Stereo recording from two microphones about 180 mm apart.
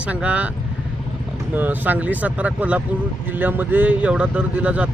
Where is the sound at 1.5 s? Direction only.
10° right (ahead or behind).